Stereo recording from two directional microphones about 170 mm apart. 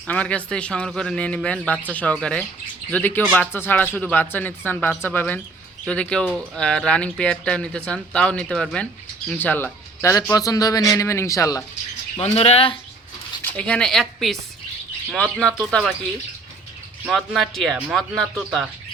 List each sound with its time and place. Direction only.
0.1 s a man's voice: 5° left (ahead or behind)
12.4 s speech: 35° left (ahead or behind)
13.4 s speech: 5° left (ahead or behind)
17.1 s speech: centre (ahead or behind)